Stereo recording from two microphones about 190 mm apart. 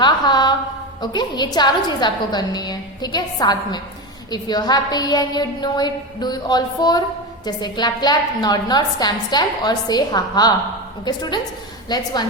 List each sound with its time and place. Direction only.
0.0 s a woman's voice: 20° left (ahead or behind)